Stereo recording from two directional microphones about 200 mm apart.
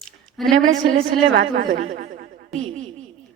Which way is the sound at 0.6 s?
40° right (ahead or behind).